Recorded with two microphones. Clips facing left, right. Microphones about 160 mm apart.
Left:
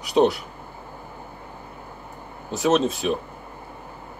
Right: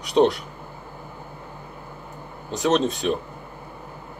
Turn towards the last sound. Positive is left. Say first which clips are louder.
# left 1 dB
turn(degrees=0)  # may be behind; listen again after turning